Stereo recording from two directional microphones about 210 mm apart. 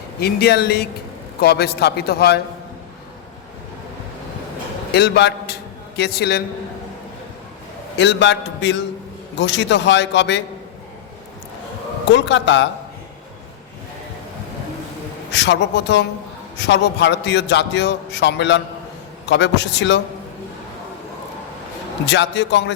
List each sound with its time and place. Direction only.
0.2 s a man's voice: 50° left (ahead or behind)
4.9 s a man's voice: 55° left (ahead or behind)
7.9 s a man's voice: 60° left (ahead or behind)
12.1 s a man's voice: 60° left (ahead or behind)
15.3 s a man's voice: 55° left (ahead or behind)
22.0 s a man's voice: 55° left (ahead or behind)